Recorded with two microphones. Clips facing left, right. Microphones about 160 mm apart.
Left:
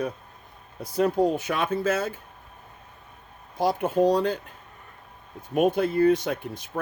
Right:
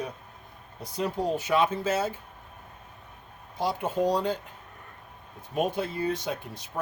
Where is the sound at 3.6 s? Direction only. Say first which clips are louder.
Left 5 dB; 55° left (ahead or behind).